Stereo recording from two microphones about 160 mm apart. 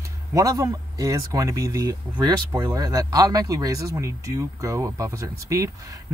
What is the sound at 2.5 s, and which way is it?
Speech, 15° right (ahead or behind).